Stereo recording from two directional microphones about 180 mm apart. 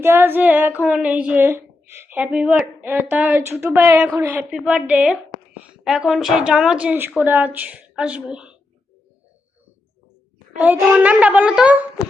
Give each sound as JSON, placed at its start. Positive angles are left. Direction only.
{"t": 0.0, "sound": "a woman's voice", "side_deg": -10}
{"t": 10.6, "sound": "a woman's voice", "side_deg": -10}